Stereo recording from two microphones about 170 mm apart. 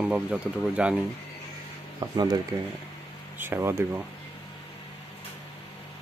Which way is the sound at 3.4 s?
15° right (ahead or behind).